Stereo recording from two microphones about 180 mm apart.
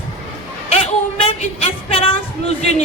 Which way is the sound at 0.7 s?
35° left (ahead or behind).